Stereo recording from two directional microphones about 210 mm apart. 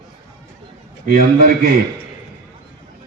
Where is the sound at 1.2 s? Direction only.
45° right (ahead or behind).